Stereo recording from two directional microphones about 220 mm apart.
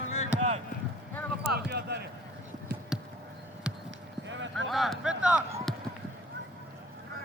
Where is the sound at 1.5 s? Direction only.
50° right (ahead or behind).